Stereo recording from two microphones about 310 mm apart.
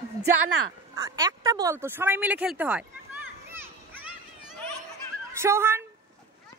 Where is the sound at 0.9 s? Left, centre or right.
Centre.